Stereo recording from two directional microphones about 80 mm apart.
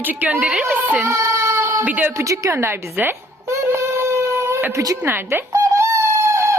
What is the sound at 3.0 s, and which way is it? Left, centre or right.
Baby cry, right.